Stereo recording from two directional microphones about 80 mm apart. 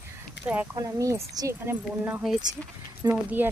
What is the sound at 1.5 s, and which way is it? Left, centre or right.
Speech, right.